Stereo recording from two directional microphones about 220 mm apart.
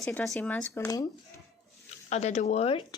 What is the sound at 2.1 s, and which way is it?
Speech, 30° left (ahead or behind).